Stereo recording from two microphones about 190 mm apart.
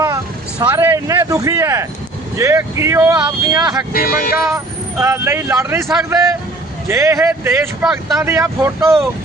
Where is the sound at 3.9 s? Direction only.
50° left (ahead or behind).